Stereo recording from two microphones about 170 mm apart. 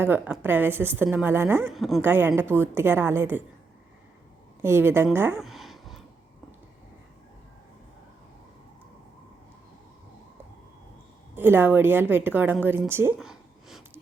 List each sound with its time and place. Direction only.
0.0 s a woman's voice: 10° right (ahead or behind)
1.7 s a woman's voice: centre (ahead or behind)
2.0 s a woman's voice: 10° right (ahead or behind)
4.6 s a woman's voice: 15° right (ahead or behind)
5.4 s a sound: centre (ahead or behind)
11.3 s a woman's voice: 10° right (ahead or behind)
13.1 s a sound: 5° right (ahead or behind)